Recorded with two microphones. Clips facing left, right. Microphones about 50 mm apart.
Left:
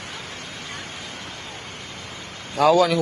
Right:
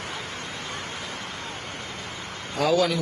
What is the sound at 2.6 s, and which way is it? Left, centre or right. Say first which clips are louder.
Speech: left 5 dB; left.